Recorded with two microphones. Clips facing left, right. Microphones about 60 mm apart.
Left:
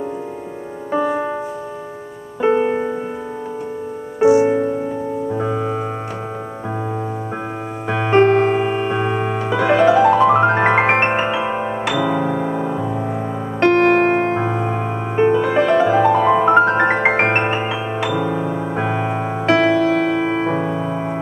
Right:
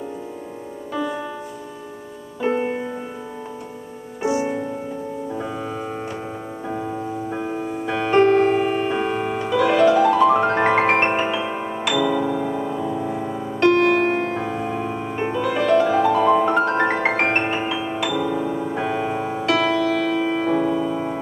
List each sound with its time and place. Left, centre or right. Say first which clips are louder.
0.9 s music: left 7 dB; left
2.4 s music: left 6 dB; left
4.2 s music: left 9 dB; left
5.3 s keyboard: left 8 dB; left
7.8 s music: left 3 dB; left